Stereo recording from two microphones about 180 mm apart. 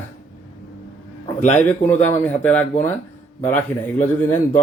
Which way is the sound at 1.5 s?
10° left (ahead or behind).